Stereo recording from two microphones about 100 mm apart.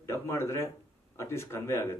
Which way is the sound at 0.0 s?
25° left (ahead or behind).